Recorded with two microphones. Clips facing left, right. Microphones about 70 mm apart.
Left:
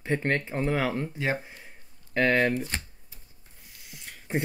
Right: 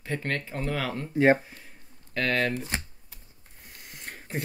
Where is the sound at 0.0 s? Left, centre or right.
Left.